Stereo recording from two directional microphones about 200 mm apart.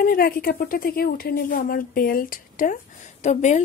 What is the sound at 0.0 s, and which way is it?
Speech, 45° left (ahead or behind).